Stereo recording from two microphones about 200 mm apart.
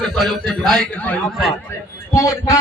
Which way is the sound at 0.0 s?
Centre (ahead or behind).